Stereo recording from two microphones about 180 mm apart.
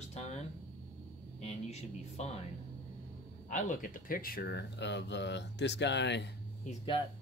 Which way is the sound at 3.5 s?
45° left (ahead or behind).